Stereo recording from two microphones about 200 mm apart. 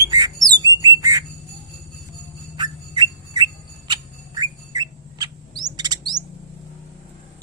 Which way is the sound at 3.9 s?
20° right (ahead or behind).